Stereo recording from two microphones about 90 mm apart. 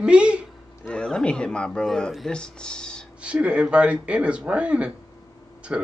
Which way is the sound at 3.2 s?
10° right (ahead or behind).